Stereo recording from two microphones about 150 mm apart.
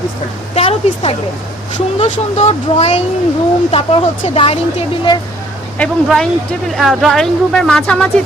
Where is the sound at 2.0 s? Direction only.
45° left (ahead or behind).